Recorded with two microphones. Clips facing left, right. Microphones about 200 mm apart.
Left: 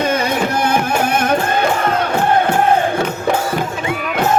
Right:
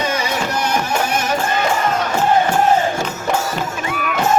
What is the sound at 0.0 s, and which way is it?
Music, 55° left (ahead or behind).